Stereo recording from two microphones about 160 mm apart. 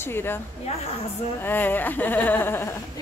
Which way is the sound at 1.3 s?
10° left (ahead or behind).